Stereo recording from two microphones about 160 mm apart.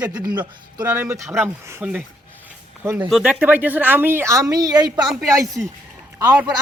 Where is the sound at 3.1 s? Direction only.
10° right (ahead or behind); by 5.0 s 25° right (ahead or behind).